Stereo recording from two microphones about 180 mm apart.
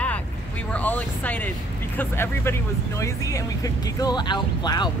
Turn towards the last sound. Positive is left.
turn(degrees=25)  # may be behind; listen again after turning